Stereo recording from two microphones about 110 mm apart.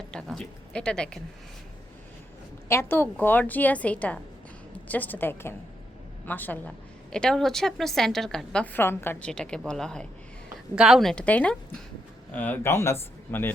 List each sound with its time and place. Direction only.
0.1 s a sound: 5° left (ahead or behind)
2.6 s a woman's voice: 20° left (ahead or behind); by 8.6 s 5° left (ahead or behind)
8.6 s a man's voice: 20° left (ahead or behind)
9.2 s a woman's voice: 5° left (ahead or behind)
11.1 s a woman's voice: 10° left (ahead or behind)